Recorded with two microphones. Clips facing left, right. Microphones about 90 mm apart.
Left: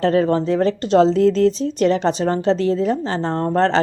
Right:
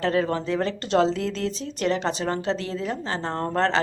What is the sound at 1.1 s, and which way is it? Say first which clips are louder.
Speech: left 12 dB; 40° left (ahead or behind).